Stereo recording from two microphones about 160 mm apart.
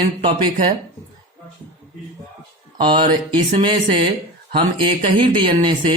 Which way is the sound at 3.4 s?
45° right (ahead or behind).